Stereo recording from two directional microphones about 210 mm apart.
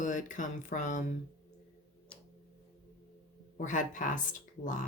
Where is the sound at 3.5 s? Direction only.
40° left (ahead or behind).